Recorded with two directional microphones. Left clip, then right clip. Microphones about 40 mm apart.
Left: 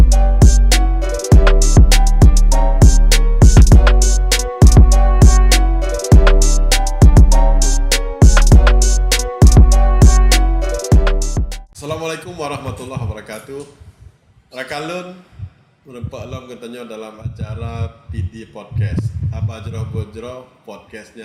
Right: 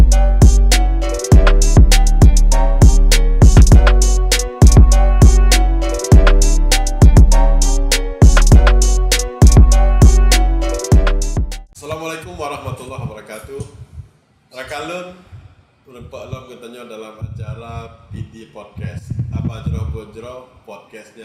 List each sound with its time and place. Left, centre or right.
0.1 s music: centre
11.8 s a sound: right
15.9 s a man's voice: right